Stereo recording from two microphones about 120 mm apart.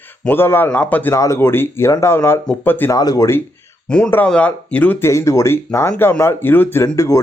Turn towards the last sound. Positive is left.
turn(degrees=25)  # may be behind; listen again after turning